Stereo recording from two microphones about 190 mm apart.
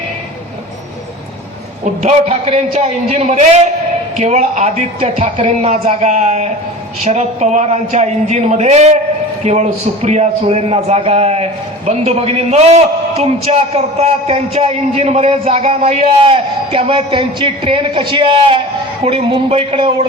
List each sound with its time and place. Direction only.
1.8 s a man's voice: 35° right (ahead or behind)